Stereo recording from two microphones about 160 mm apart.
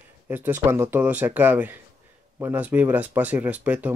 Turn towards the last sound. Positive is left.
turn(degrees=-10)  # may be behind; listen again after turning